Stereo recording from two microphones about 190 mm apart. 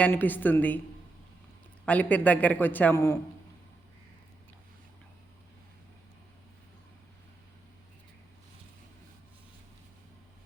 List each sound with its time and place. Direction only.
0.0 s a man's voice: 10° left (ahead or behind)
1.8 s a man's voice: 10° left (ahead or behind)